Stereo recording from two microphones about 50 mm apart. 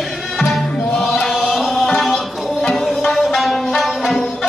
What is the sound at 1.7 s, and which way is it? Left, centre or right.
Music, centre.